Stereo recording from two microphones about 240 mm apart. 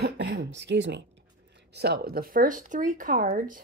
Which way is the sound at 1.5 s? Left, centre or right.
Right.